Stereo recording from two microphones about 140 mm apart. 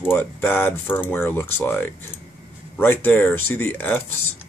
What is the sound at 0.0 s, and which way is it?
Speech, 15° left (ahead or behind).